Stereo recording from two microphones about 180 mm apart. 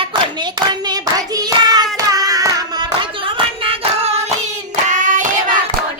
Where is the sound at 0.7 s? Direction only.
20° right (ahead or behind).